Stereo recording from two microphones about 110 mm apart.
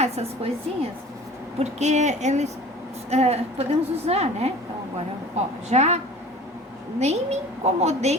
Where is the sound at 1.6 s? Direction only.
90° right.